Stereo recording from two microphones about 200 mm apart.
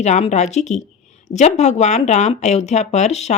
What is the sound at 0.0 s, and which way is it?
Speech, 35° left (ahead or behind).